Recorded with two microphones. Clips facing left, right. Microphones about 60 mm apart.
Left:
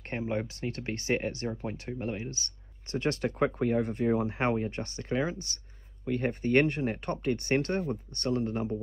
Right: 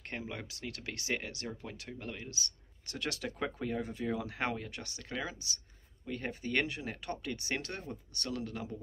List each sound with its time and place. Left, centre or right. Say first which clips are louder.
0.1 s speech: left 10 dB; left